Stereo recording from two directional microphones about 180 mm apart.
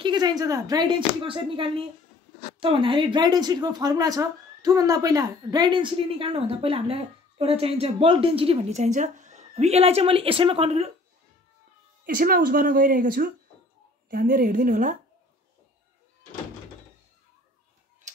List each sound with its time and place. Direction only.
0.0 s a woman's voice: 25° right (ahead or behind)
12.0 s speech: 50° right (ahead or behind)